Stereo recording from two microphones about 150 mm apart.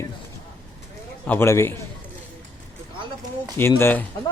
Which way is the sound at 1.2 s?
15° left (ahead or behind).